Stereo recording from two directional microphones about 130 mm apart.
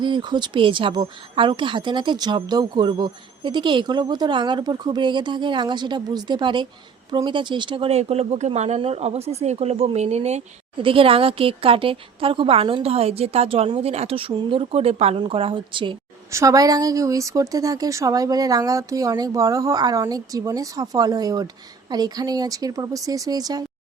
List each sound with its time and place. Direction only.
0.0 s speech: 35° right (ahead or behind); by 10.4 s 55° right (ahead or behind)
10.8 s speech: 45° right (ahead or behind)
16.3 s a woman's voice: 25° right (ahead or behind)